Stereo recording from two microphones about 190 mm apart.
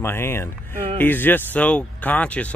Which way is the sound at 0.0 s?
10° left (ahead or behind).